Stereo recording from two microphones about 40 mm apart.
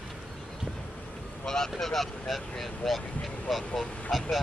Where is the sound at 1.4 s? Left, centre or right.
Centre.